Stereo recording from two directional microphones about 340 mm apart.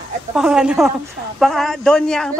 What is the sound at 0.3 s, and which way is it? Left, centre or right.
Speech, centre.